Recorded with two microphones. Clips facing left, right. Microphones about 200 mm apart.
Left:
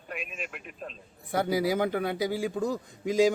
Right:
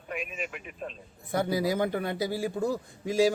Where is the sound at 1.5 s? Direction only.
15° left (ahead or behind).